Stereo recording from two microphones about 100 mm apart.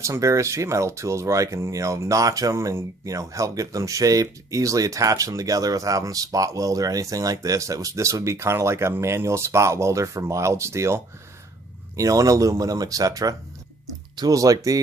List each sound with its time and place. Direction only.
0.0 s speech: 30° right (ahead or behind)